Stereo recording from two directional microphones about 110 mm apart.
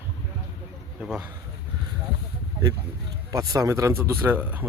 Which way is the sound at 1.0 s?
10° right (ahead or behind).